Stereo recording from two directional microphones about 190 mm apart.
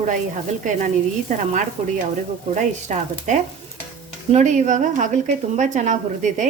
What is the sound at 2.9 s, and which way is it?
A woman's voice, 40° right (ahead or behind).